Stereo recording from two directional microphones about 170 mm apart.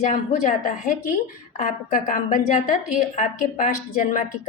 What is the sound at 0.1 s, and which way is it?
Speech, 50° left (ahead or behind).